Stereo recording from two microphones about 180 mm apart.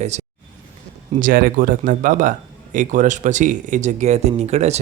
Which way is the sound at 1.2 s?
50° right (ahead or behind).